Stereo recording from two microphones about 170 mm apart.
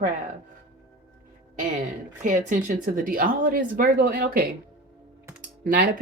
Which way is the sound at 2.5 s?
50° right (ahead or behind).